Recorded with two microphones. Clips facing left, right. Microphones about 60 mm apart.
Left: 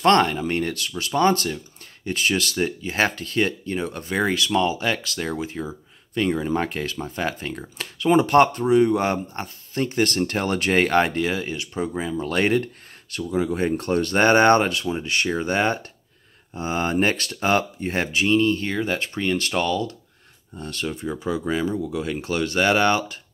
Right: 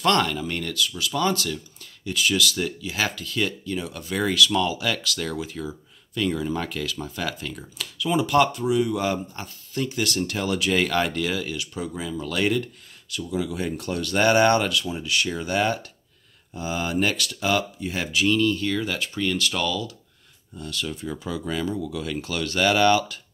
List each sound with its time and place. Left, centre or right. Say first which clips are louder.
0.0 s speech: left 4 dB; left